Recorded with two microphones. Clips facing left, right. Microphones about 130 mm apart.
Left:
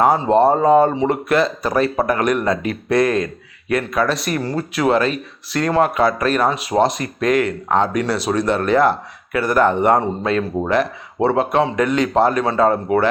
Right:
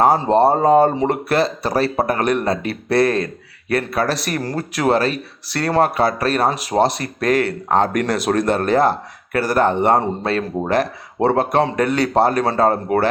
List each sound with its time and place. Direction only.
0.0 s speech: 35° right (ahead or behind)
7.9 s speech: 50° right (ahead or behind)